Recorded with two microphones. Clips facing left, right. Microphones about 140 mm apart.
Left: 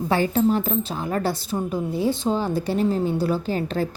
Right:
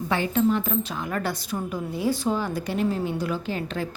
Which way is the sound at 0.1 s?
35° left (ahead or behind).